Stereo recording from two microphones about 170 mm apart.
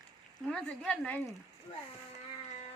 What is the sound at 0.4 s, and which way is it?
Speech, 5° left (ahead or behind).